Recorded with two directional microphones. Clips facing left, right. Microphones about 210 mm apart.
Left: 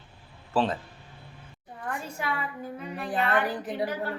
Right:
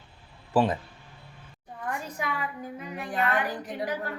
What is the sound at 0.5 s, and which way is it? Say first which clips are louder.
Speech: right 2 dB; 15° right (ahead or behind).